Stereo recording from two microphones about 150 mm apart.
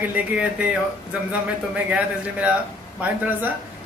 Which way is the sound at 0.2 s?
10° right (ahead or behind).